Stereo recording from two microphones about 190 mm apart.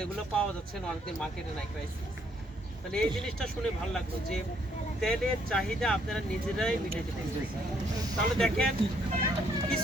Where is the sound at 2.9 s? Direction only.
5° left (ahead or behind).